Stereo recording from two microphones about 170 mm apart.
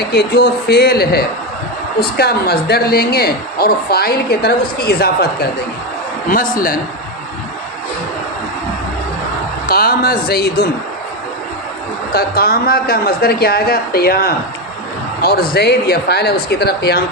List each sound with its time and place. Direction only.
0.0 s a woman's voice: 70° left (ahead or behind)
6.3 s a woman's voice: 55° left (ahead or behind)
9.6 s a woman's voice: 60° left (ahead or behind)
12.1 s a woman's voice: 65° left (ahead or behind)